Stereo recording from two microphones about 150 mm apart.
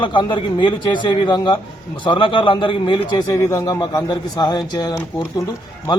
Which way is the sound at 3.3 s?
20° left (ahead or behind).